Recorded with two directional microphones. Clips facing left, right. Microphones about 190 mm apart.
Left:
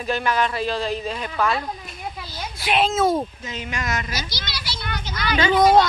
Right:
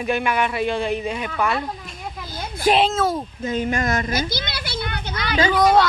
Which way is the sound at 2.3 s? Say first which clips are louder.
Right 5 dB; 50° right (ahead or behind).